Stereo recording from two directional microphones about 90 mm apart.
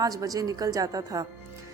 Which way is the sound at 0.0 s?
40° right (ahead or behind).